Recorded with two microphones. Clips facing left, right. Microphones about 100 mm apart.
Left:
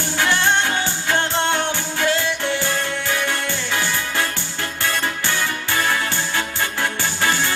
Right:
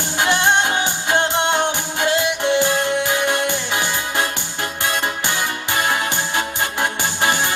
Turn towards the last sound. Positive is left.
turn(degrees=-20)  # may be behind; listen again after turning